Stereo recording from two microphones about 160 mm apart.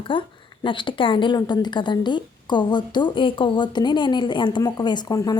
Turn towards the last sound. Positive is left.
turn(degrees=25)  # may be behind; listen again after turning